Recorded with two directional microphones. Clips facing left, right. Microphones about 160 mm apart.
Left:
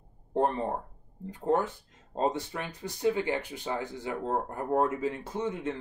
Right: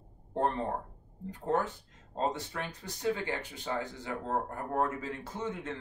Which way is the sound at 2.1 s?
15° left (ahead or behind).